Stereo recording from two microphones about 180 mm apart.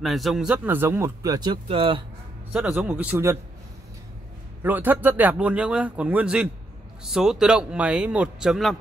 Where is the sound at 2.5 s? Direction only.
10° right (ahead or behind).